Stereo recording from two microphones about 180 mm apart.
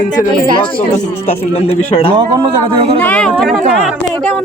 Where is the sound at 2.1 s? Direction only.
30° right (ahead or behind).